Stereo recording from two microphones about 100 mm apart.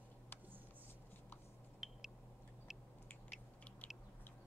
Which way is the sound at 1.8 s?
5° right (ahead or behind).